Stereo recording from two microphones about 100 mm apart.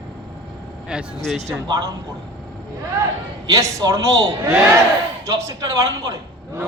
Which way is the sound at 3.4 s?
35° right (ahead or behind).